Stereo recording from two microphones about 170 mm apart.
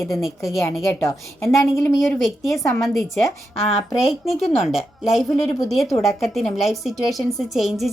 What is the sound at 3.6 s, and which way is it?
Speech, 35° left (ahead or behind).